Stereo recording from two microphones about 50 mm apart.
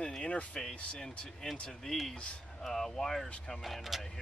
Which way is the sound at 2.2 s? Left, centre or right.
Centre.